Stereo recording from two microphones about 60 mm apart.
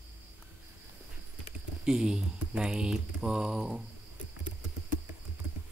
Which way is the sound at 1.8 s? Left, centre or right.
Centre.